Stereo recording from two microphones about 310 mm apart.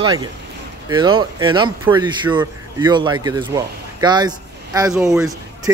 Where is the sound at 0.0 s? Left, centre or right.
Centre.